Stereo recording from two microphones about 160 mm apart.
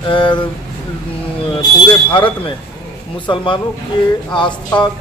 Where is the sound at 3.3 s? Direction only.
30° left (ahead or behind).